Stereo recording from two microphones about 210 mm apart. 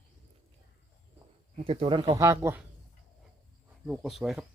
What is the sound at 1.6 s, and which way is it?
Speech, 25° right (ahead or behind).